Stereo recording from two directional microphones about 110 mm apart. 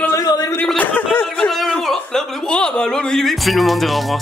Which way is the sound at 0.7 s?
15° left (ahead or behind).